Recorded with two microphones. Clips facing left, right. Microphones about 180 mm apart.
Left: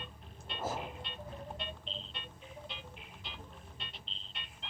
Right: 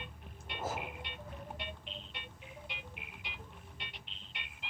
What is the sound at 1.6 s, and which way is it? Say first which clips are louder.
Music: left 2 dB; 15° right (ahead or behind).